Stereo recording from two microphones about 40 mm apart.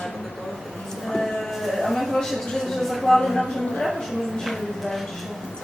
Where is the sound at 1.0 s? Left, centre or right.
Centre.